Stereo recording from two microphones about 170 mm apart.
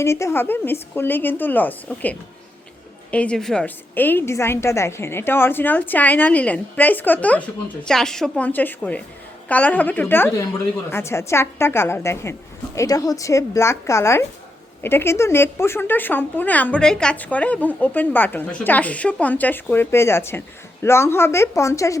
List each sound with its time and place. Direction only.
0.0 s speech: 15° left (ahead or behind)